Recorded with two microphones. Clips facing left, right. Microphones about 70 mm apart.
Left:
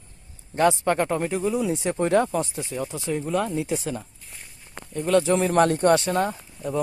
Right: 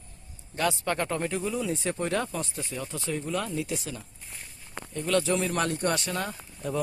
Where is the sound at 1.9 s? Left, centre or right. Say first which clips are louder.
Left 8 dB; left.